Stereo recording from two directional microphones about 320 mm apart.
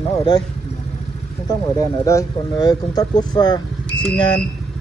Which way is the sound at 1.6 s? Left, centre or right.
Centre.